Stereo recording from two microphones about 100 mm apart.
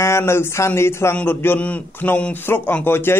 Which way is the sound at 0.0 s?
25° left (ahead or behind).